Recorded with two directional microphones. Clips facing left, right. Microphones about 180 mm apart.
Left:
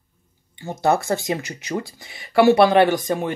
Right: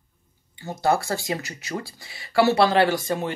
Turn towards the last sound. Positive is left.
turn(degrees=20)  # may be behind; listen again after turning